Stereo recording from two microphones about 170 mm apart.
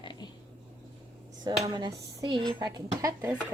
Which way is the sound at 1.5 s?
25° right (ahead or behind).